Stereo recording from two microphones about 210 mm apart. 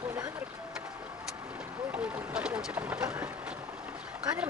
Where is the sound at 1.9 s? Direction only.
5° right (ahead or behind).